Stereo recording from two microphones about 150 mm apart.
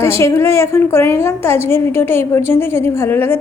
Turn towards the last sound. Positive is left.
turn(degrees=15)  # may be behind; listen again after turning